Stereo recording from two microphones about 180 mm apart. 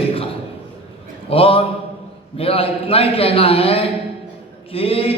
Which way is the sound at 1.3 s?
30° left (ahead or behind).